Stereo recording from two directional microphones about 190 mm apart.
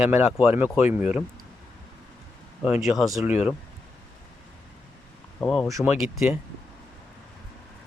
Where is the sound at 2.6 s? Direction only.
5° right (ahead or behind).